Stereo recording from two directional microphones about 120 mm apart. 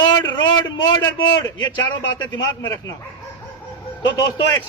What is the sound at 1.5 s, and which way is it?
A man's voice, 40° left (ahead or behind).